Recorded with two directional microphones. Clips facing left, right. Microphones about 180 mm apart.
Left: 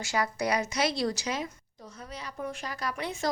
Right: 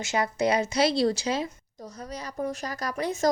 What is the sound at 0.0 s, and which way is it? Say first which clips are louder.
Speech: right 4 dB; 20° right (ahead or behind).